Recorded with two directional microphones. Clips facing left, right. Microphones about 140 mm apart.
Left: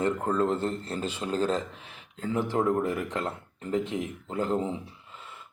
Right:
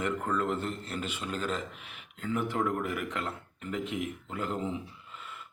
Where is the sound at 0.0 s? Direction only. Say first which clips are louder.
Left 5 dB; 30° left (ahead or behind).